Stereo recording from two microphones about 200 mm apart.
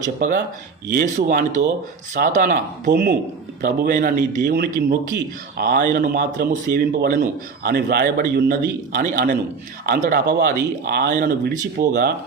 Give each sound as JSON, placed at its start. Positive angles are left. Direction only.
{"t": 0.2, "sound": "a man's voice", "side_deg": -40}
{"t": 2.9, "sound": "a man's voice", "side_deg": -55}